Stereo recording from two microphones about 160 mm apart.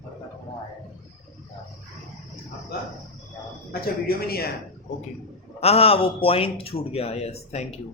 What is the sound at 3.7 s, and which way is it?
Speech, 75° left (ahead or behind).